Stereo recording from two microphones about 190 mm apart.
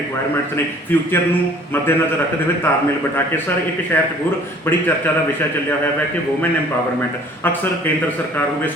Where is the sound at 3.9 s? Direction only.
10° left (ahead or behind).